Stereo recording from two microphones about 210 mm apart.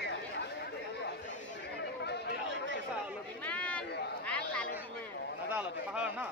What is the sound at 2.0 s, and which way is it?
Chatter, 50° left (ahead or behind).